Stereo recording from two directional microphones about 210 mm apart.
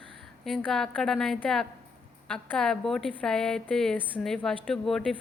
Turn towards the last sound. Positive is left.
turn(degrees=5)  # may be behind; listen again after turning